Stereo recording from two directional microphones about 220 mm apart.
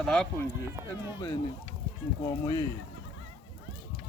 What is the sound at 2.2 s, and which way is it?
Speech, 15° left (ahead or behind).